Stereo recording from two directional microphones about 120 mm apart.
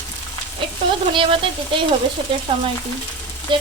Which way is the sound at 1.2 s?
45° right (ahead or behind).